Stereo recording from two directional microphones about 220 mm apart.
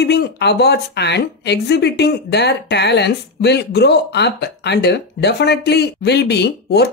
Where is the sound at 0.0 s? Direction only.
50° left (ahead or behind).